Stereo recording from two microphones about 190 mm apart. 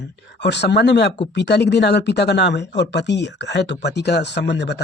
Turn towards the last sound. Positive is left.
turn(degrees=65)  # may be behind; listen again after turning